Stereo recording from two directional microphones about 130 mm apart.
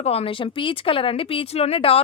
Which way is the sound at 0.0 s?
50° left (ahead or behind).